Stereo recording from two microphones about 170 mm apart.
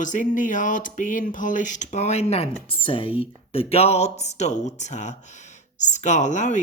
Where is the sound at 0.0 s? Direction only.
50° left (ahead or behind).